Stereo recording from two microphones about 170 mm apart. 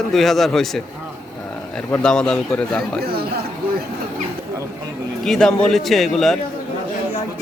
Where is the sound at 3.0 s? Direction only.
65° right (ahead or behind).